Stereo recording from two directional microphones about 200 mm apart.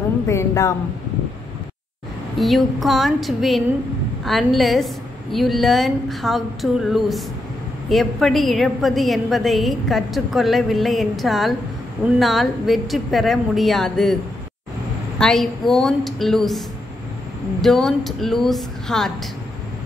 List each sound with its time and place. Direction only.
0.3 s a woman's voice: 15° left (ahead or behind)
2.3 s a woman's voice: centre (ahead or behind)
15.1 s a woman's voice: centre (ahead or behind)